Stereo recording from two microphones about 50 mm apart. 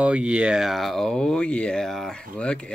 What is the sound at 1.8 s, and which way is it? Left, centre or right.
Speech, centre.